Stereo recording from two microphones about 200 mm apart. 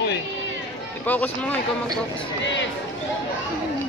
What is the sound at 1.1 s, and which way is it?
Speech, 10° left (ahead or behind).